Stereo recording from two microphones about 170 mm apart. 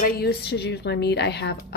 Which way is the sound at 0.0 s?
65° left (ahead or behind).